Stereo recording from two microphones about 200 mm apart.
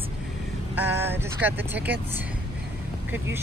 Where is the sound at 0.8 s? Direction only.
10° right (ahead or behind).